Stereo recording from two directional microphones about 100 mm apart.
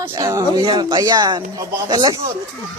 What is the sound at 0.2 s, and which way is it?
Speech, 35° right (ahead or behind).